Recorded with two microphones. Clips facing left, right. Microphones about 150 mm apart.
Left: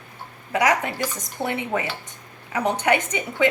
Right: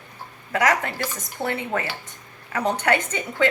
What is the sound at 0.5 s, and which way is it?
A woman's voice, 15° left (ahead or behind).